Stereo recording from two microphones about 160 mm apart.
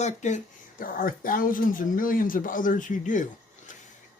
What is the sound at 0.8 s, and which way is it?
Speech, 60° left (ahead or behind).